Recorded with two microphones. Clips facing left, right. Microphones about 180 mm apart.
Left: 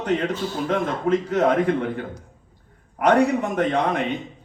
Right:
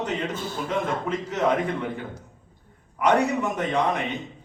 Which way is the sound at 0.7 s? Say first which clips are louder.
Left 5 dB; 55° left (ahead or behind).